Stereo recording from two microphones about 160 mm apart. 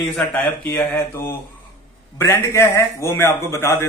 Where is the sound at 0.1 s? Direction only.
5° left (ahead or behind).